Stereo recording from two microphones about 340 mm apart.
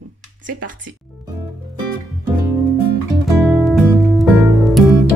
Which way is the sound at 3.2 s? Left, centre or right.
Centre.